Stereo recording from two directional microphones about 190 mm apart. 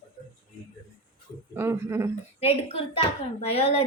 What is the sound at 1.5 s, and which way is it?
Speech, 10° right (ahead or behind).